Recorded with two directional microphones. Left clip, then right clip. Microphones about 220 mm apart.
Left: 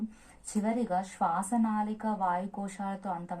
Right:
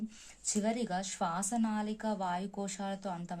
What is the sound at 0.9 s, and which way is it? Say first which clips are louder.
Speech: left 5 dB; 50° right (ahead or behind).